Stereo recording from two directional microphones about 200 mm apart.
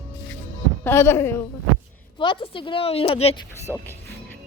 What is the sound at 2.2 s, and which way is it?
A woman's voice, 25° left (ahead or behind).